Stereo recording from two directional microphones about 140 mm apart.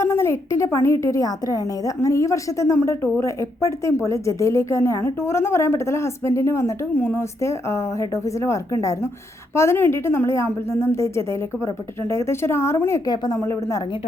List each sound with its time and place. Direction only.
0.0 s a woman's voice: 20° left (ahead or behind)